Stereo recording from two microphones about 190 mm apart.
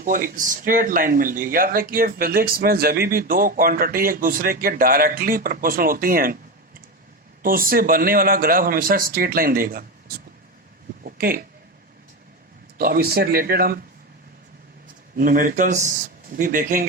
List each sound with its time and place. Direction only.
0.0 s speech: 45° right (ahead or behind)
7.4 s speech: 50° right (ahead or behind)
11.0 s a sound: 50° right (ahead or behind)
12.7 s speech: 50° right (ahead or behind)
15.2 s speech: 45° right (ahead or behind)